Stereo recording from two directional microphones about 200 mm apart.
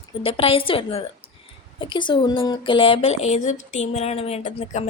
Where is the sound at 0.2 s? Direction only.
25° left (ahead or behind).